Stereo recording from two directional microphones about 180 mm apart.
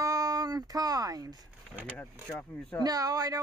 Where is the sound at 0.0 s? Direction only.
20° right (ahead or behind).